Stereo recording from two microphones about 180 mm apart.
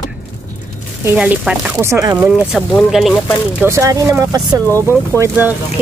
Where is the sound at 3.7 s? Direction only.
15° right (ahead or behind).